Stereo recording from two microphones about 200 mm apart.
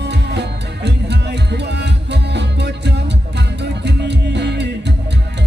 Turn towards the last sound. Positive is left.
turn(degrees=-60)  # may be behind; listen again after turning